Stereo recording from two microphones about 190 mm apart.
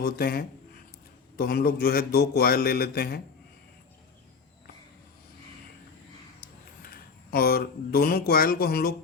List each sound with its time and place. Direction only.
0.0 s a man's voice: 55° left (ahead or behind)
6.8 s speech: 50° left (ahead or behind)